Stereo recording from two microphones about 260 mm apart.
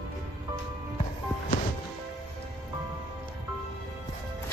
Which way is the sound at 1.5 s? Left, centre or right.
Left.